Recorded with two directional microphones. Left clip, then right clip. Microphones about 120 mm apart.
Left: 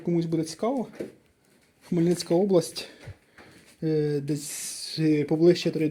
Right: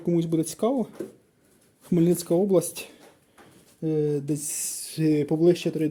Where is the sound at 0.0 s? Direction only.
45° right (ahead or behind).